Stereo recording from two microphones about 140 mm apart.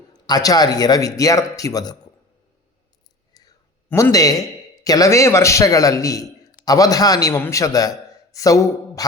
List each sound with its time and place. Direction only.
0.1 s speech: 30° left (ahead or behind)
3.3 s clicking: 30° left (ahead or behind)
3.8 s a man's voice: 20° left (ahead or behind)